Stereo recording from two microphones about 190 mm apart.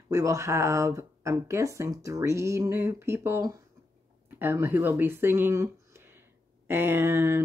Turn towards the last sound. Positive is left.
turn(degrees=-10)  # may be behind; listen again after turning